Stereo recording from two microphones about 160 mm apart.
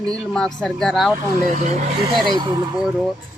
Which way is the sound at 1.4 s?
45° right (ahead or behind).